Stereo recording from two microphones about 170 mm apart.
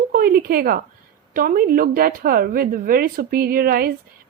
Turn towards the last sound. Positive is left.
turn(degrees=-60)  # may be behind; listen again after turning